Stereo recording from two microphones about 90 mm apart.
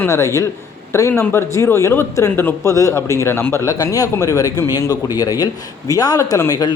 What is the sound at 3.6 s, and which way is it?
Speech, 40° left (ahead or behind).